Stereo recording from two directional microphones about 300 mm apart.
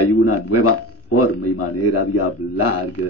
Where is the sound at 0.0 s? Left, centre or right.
Left.